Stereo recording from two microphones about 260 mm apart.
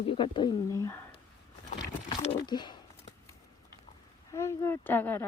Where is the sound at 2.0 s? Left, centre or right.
Centre.